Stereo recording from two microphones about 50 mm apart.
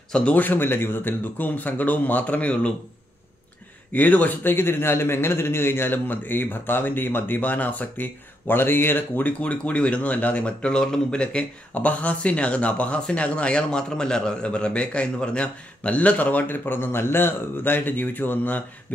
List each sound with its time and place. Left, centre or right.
0.1 s speech: left
3.9 s a man's voice: left
9.4 s a man's voice: left
11.7 s a man's voice: left